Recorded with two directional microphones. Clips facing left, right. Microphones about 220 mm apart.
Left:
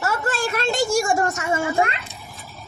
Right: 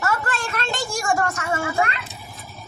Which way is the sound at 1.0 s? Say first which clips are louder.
Left 2 dB; 25° left (ahead or behind).